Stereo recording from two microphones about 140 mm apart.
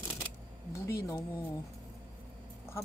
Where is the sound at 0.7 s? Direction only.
20° left (ahead or behind).